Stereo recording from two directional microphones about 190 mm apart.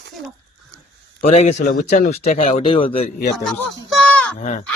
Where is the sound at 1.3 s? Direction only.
35° left (ahead or behind).